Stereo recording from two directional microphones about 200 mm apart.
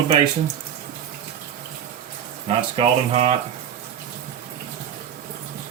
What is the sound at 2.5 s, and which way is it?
Speech, 30° right (ahead or behind).